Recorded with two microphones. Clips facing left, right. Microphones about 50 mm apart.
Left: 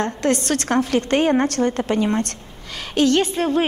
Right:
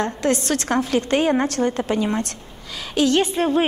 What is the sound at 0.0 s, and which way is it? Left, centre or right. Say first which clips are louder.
A woman's voice: left 1 dB; left.